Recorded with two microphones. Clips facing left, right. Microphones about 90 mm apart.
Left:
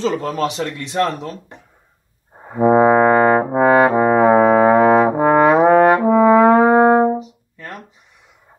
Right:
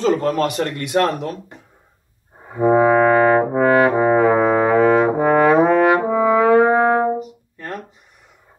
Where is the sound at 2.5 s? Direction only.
15° left (ahead or behind).